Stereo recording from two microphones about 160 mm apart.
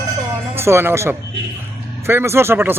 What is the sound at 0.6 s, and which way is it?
Speech, 15° right (ahead or behind).